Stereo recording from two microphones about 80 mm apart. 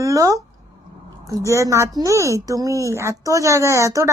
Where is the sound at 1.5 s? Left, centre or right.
Right.